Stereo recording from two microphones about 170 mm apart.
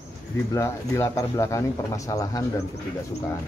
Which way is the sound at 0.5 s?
15° left (ahead or behind).